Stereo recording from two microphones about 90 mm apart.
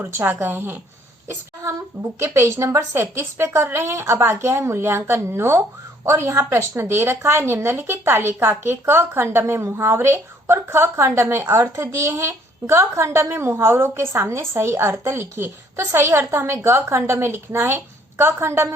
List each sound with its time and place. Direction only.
0.0 s a woman's voice: 25° right (ahead or behind)
2.1 s a woman's voice: 30° right (ahead or behind)